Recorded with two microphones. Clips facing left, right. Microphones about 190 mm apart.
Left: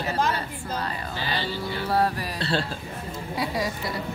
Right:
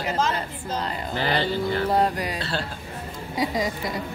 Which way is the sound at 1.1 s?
60° right (ahead or behind).